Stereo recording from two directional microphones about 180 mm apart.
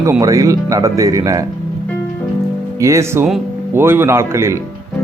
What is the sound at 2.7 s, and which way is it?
Speech, 15° right (ahead or behind).